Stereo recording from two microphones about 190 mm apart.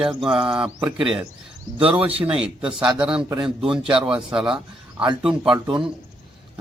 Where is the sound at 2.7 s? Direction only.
5° right (ahead or behind).